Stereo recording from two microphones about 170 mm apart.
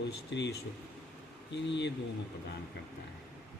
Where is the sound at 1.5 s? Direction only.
90° left.